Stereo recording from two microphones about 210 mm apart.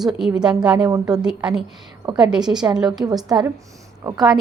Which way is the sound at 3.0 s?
20° right (ahead or behind).